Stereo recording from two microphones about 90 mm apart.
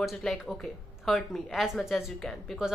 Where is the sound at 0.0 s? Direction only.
Centre (ahead or behind).